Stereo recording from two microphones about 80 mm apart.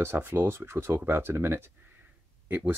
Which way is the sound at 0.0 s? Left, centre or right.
Right.